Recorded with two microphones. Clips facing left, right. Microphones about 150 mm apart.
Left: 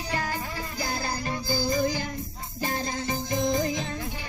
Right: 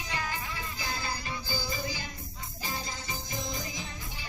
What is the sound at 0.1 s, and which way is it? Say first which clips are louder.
Music: left 5 dB; 40° left (ahead or behind).